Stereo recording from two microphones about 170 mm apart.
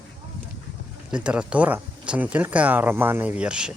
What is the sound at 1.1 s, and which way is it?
Speech, 5° right (ahead or behind).